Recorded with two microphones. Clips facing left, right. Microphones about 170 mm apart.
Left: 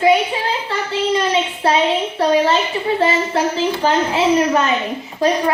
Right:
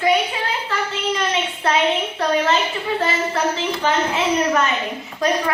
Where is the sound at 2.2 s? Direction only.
30° left (ahead or behind).